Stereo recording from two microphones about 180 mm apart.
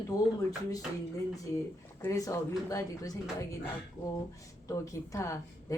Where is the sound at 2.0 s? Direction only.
15° left (ahead or behind).